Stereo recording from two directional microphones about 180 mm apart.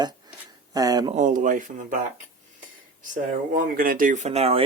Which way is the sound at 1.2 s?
45° right (ahead or behind).